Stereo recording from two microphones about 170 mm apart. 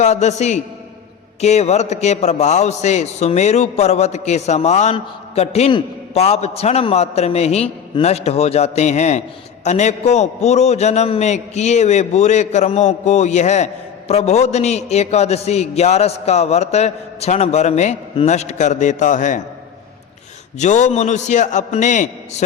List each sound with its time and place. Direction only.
0.0 s a man's voice: 45° left (ahead or behind)
20.6 s a man's voice: 45° left (ahead or behind)